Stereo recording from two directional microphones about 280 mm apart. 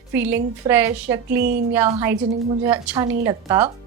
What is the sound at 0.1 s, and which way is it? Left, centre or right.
Speech, centre.